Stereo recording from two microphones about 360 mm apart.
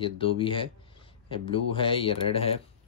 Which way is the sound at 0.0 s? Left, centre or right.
Centre.